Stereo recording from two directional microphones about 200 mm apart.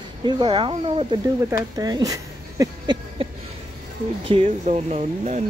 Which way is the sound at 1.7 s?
20° right (ahead or behind).